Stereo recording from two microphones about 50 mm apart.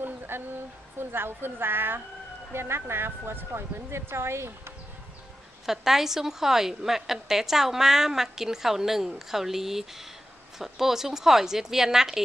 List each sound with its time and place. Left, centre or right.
0.0 s a woman's voice: right
5.7 s a woman's voice: centre